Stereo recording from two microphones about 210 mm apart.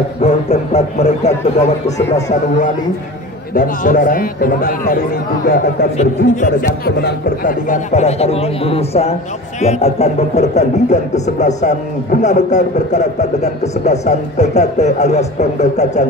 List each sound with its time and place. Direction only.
0.2 s speech: 30° left (ahead or behind)
2.0 s speech: 15° left (ahead or behind)
3.5 s speech: 40° left (ahead or behind)
7.0 s speech: 50° left (ahead or behind)
7.6 s speech: 35° left (ahead or behind)